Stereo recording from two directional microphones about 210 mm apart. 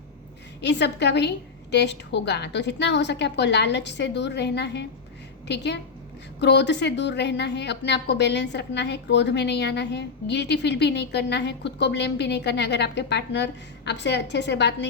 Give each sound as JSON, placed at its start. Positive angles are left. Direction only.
{"t": 0.6, "sound": "a woman's voice", "side_deg": 55}